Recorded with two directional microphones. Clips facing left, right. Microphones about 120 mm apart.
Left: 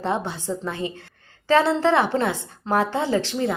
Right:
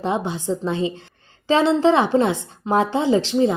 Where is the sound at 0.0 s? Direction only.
15° right (ahead or behind).